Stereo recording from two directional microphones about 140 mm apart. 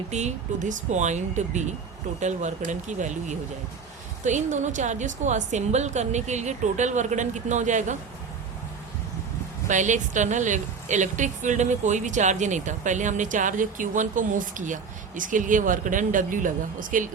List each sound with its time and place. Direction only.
0.1 s a woman's voice: 55° right (ahead or behind)
9.6 s a woman's voice: 60° right (ahead or behind)